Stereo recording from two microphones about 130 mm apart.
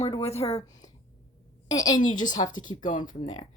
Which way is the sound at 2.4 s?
40° left (ahead or behind).